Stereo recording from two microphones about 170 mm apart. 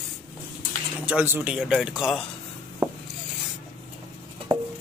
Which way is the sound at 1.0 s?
10° right (ahead or behind).